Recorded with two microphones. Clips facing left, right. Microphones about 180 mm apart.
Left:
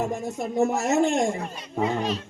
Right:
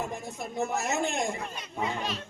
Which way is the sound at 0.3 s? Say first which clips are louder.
Left 8 dB; 45° left (ahead or behind).